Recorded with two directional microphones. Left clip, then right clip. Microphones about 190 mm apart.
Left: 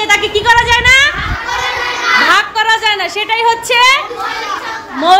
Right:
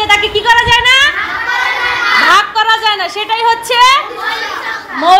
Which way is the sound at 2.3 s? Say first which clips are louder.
Right 2 dB; 10° left (ahead or behind).